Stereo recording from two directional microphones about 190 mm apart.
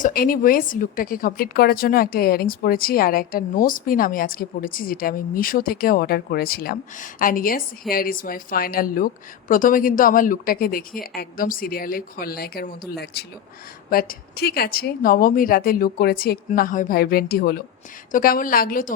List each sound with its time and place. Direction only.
0.0 s a woman's voice: 50° left (ahead or behind)